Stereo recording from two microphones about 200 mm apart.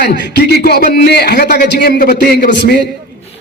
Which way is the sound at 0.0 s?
55° left (ahead or behind).